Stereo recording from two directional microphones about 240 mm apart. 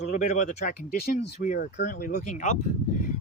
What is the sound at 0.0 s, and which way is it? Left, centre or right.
Speech, left.